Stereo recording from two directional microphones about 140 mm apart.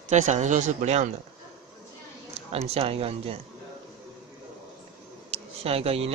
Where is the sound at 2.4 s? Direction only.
45° right (ahead or behind).